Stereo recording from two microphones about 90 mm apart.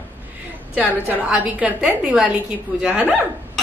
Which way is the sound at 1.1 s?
15° right (ahead or behind).